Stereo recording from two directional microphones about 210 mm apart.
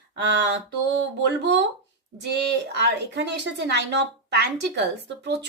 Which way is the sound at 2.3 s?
55° right (ahead or behind).